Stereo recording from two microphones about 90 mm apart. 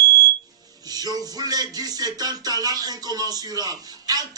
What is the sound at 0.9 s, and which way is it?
Speech, 45° right (ahead or behind).